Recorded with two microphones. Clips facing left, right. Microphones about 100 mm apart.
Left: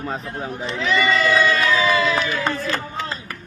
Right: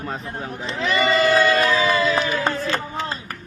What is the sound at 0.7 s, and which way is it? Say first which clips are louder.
Speech: even; 45° right (ahead or behind).